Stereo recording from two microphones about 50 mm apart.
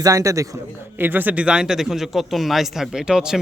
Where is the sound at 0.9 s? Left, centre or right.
Right.